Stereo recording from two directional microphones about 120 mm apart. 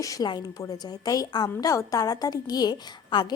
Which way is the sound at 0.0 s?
30° left (ahead or behind).